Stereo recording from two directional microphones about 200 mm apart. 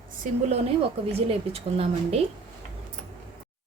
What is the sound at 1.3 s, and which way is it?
Speech, 30° right (ahead or behind).